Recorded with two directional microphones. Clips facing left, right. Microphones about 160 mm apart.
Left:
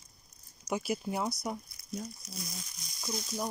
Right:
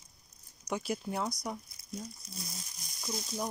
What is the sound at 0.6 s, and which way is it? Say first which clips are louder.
Speech: left 2 dB; 10° left (ahead or behind).